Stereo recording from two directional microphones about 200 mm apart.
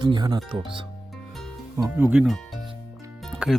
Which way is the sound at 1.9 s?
5° right (ahead or behind).